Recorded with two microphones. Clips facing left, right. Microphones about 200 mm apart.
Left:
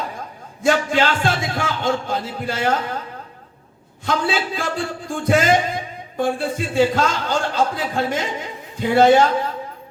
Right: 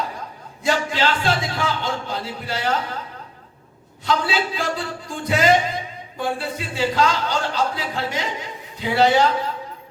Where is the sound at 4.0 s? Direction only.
50° left (ahead or behind).